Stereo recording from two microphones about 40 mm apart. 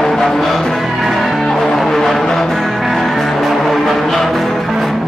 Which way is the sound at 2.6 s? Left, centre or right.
Centre.